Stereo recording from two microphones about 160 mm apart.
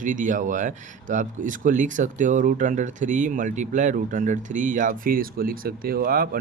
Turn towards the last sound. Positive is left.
turn(degrees=-65)  # may be behind; listen again after turning